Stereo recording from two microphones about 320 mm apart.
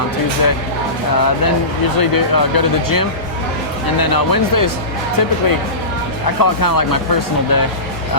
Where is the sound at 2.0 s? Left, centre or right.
Left.